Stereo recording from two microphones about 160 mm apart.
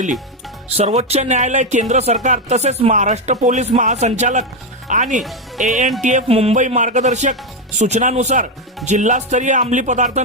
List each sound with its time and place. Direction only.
0.8 s speech: 40° right (ahead or behind)